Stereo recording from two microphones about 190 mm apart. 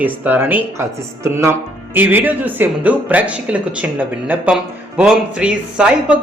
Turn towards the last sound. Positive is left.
turn(degrees=-5)  # may be behind; listen again after turning